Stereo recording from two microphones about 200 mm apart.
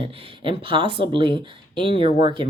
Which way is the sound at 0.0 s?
25° right (ahead or behind).